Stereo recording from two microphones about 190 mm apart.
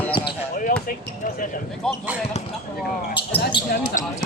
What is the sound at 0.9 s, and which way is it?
Speech, 45° left (ahead or behind).